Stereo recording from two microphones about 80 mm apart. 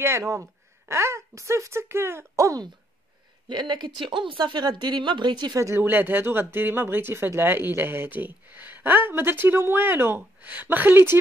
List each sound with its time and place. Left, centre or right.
0.0 s a woman's voice: right
3.4 s speech: right
5.6 s speech: right
5.9 s speech: right